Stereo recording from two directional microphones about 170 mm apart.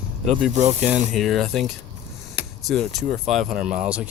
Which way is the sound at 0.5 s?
40° right (ahead or behind).